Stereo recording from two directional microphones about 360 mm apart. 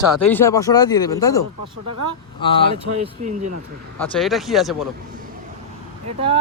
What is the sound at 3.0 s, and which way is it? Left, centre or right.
Speech, centre.